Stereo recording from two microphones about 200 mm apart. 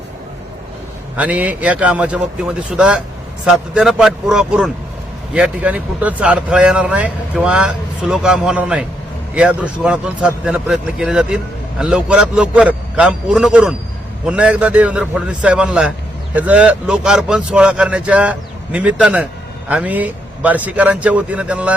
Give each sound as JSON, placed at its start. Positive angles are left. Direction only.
{"t": 1.1, "sound": "speech", "side_deg": -5}